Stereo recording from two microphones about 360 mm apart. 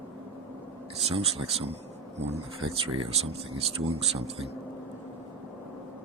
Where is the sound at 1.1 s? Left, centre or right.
Centre.